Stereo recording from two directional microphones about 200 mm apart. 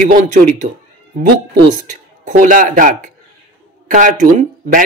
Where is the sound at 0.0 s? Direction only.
40° right (ahead or behind).